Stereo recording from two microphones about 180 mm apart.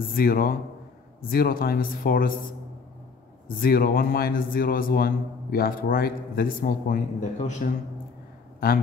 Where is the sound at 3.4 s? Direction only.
55° left (ahead or behind).